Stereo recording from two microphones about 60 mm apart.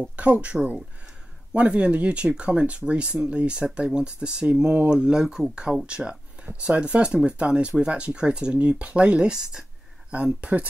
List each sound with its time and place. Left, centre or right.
0.0 s speech: right
10.1 s speech: right